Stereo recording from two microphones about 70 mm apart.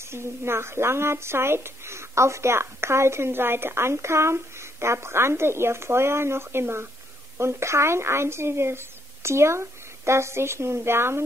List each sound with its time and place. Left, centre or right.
0.1 s speech: right